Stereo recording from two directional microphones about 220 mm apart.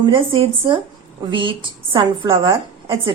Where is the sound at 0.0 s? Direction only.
20° right (ahead or behind).